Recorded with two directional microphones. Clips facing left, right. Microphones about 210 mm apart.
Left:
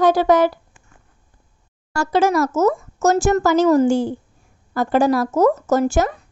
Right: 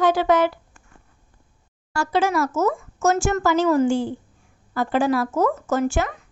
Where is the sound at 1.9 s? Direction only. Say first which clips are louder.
Left 4 dB; 45° left (ahead or behind).